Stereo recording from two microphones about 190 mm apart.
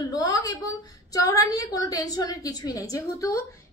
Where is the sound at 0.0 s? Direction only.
20° left (ahead or behind).